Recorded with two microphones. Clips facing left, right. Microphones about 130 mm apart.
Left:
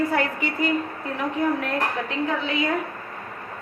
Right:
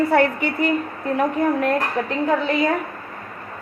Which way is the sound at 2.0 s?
40° right (ahead or behind).